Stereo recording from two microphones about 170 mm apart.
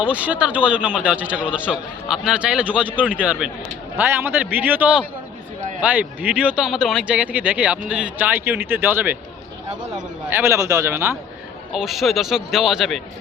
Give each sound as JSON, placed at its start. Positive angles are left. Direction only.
{"t": 0.0, "sound": "speech", "side_deg": -10}
{"t": 10.2, "sound": "speech", "side_deg": -15}
{"t": 11.7, "sound": "a man's voice", "side_deg": 0}